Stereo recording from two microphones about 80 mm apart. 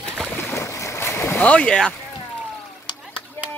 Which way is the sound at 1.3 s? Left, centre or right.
Centre.